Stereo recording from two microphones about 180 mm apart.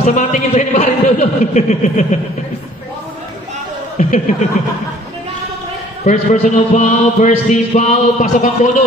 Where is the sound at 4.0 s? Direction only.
45° left (ahead or behind).